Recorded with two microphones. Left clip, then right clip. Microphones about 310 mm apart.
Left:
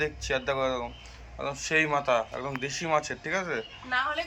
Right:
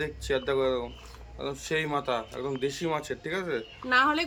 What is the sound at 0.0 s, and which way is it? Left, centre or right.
Speech, centre.